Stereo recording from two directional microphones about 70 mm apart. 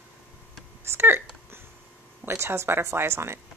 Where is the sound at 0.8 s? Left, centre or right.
Right.